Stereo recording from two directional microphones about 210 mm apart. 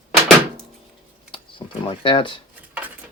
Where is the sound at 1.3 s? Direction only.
25° left (ahead or behind).